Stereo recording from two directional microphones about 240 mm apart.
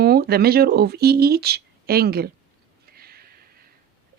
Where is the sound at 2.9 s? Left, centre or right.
Right.